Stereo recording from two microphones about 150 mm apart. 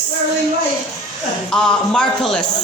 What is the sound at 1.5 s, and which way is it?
Speech, 5° left (ahead or behind).